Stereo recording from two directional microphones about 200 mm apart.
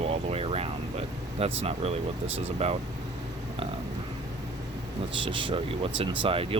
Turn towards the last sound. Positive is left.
turn(degrees=-25)  # may be behind; listen again after turning